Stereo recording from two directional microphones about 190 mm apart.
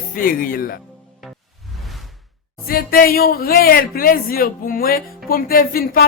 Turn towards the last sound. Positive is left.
turn(degrees=50)  # may be behind; listen again after turning